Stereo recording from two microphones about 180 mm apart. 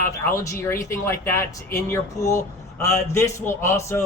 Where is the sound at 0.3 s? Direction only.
15° left (ahead or behind).